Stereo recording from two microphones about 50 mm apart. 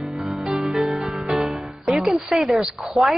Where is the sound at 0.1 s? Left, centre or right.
Centre.